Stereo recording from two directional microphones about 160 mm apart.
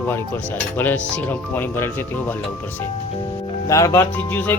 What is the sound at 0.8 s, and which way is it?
Speech, 10° left (ahead or behind).